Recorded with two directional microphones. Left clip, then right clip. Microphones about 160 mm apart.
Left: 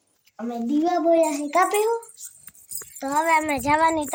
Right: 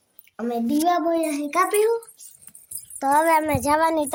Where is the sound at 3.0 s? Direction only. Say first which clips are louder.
Right 3 dB; 30° right (ahead or behind).